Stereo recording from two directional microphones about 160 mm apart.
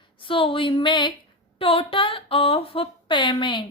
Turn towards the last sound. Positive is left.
turn(degrees=30)  # may be behind; listen again after turning